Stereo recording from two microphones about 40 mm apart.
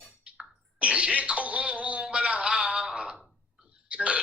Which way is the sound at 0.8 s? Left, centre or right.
Right.